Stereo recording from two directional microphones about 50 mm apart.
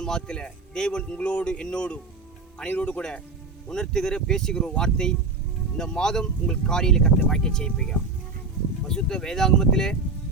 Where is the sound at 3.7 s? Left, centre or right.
Centre.